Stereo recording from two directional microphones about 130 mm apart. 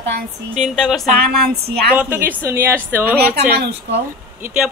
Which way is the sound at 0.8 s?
Centre (ahead or behind).